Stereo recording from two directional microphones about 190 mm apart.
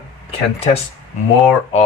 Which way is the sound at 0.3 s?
30° left (ahead or behind).